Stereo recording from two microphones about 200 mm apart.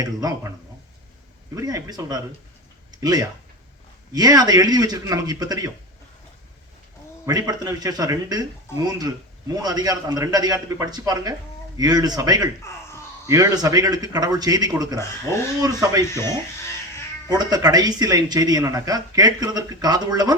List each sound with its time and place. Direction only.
0.0 s speech: 20° right (ahead or behind)
1.5 s speech: 20° right (ahead or behind)
7.3 s speech: 20° right (ahead or behind)
12.7 s speech: 15° left (ahead or behind)
13.2 s speech: 15° right (ahead or behind)
14.9 s speech: 15° left (ahead or behind)
15.6 s speech: 20° right (ahead or behind)
16.1 s speech: 15° left (ahead or behind)
17.2 s speech: 20° right (ahead or behind)